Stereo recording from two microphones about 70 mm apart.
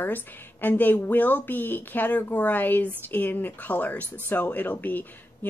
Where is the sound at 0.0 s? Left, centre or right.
Left.